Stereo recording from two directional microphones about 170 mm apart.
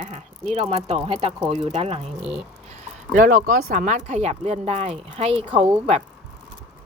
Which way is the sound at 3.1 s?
50° right (ahead or behind).